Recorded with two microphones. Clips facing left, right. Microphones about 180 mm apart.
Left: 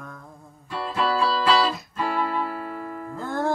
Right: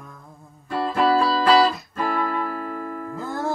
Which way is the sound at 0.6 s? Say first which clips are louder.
Right 5 dB; 55° right (ahead or behind).